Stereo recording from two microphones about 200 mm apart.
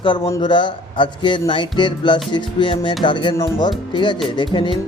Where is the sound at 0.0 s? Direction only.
25° left (ahead or behind).